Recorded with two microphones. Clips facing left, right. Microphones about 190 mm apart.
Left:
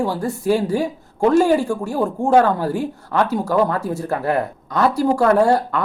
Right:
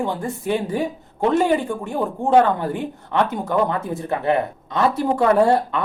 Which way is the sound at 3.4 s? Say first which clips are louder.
Left 2 dB; 20° right (ahead or behind).